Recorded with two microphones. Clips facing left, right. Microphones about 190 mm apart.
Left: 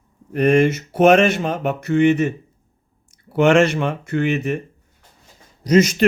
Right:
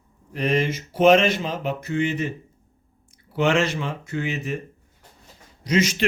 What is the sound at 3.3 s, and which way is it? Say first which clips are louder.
Mantra: left 7 dB; 55° left (ahead or behind).